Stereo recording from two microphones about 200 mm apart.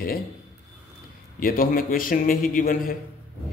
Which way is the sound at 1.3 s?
45° left (ahead or behind).